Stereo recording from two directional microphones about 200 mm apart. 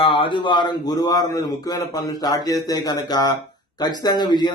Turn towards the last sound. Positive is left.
turn(degrees=20)  # may be behind; listen again after turning